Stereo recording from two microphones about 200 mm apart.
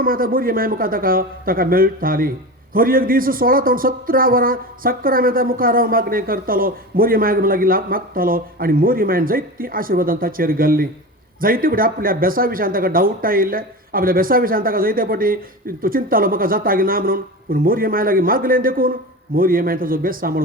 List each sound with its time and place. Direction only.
0.0 s a woman's voice: 45° right (ahead or behind)